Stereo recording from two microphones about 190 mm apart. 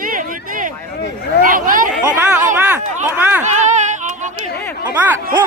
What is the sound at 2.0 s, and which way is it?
Speech, 10° right (ahead or behind).